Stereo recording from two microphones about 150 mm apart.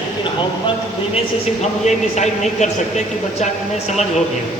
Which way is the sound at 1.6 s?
50° left (ahead or behind).